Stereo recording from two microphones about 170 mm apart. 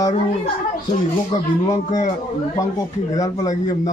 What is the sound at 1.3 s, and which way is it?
Speech, 20° left (ahead or behind).